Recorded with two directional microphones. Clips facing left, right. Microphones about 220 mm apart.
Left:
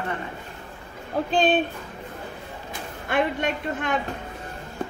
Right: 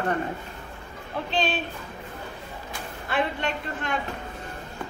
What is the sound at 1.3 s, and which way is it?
Speech, 50° left (ahead or behind).